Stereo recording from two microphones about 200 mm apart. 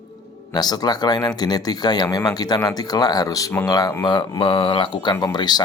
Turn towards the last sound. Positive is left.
turn(degrees=20)  # may be behind; listen again after turning